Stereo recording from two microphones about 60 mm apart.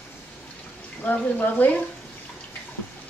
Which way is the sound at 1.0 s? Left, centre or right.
Left.